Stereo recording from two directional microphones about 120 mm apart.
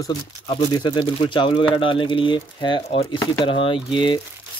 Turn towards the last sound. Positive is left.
turn(degrees=40)  # may be behind; listen again after turning